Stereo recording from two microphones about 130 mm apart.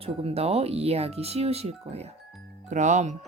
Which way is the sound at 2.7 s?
70° right (ahead or behind).